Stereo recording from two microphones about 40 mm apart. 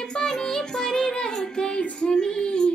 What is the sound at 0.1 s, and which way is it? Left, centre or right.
Music, centre.